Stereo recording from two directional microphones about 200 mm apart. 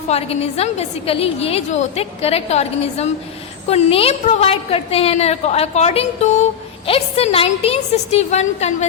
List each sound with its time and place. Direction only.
0.1 s a woman's voice: 30° left (ahead or behind)